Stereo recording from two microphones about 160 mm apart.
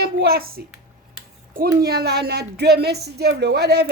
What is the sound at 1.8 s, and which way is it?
A woman's voice, 85° right.